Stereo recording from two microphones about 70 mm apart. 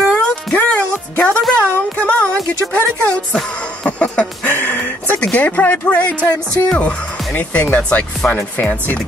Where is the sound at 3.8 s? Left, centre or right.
Centre.